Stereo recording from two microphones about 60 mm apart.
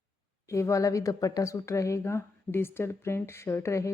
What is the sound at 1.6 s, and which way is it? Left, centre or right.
Speech, left.